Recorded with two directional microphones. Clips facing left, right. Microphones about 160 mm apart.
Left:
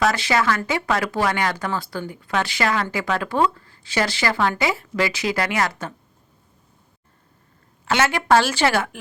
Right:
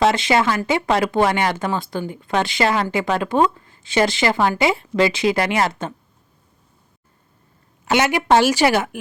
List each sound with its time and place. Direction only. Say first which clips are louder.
0.0 s speech: right 3 dB; 25° right (ahead or behind)
7.9 s a woman's voice: right 2 dB; 15° right (ahead or behind)